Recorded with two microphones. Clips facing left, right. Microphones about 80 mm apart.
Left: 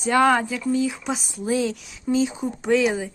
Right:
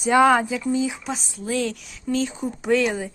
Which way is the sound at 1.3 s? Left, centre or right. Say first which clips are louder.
Left 3 dB; centre.